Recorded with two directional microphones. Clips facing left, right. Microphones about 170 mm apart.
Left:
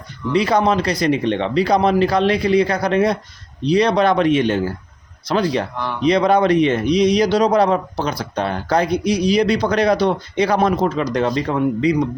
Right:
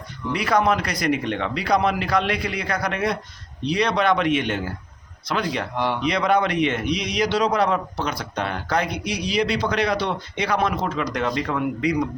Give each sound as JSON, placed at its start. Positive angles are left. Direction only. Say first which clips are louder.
{"t": 0.3, "sound": "a man's voice", "louder": "left 4 dB", "side_deg": 25}
{"t": 5.7, "sound": "speech", "louder": "right 2 dB", "side_deg": -20}
{"t": 6.0, "sound": "a man's voice", "louder": "left 8 dB", "side_deg": 35}